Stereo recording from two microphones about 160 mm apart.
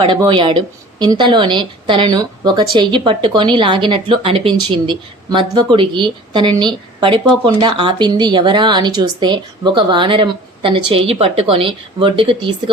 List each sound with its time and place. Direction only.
0.0 s speech: 30° right (ahead or behind)